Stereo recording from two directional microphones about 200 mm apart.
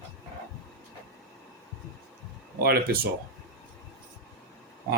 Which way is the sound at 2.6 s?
50° right (ahead or behind).